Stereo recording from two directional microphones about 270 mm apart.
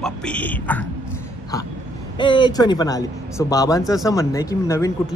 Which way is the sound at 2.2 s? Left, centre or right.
Centre.